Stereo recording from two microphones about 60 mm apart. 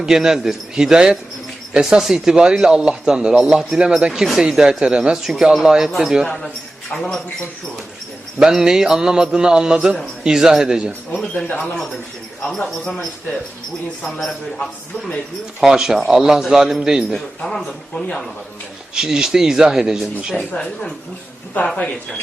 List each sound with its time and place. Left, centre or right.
0.0 s a man's voice: centre
6.9 s a man's voice: centre
8.4 s speech: centre
11.6 s a man's voice: centre
14.0 s a man's voice: centre
15.6 s speech: centre
17.2 s a man's voice: centre
18.9 s speech: centre
20.4 s a man's voice: centre